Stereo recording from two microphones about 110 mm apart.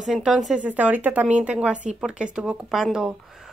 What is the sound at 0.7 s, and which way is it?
A woman's voice, 15° right (ahead or behind).